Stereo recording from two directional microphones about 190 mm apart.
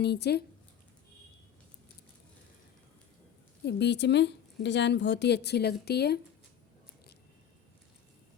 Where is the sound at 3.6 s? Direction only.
65° left (ahead or behind).